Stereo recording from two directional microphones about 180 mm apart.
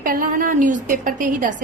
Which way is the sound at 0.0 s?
50° right (ahead or behind).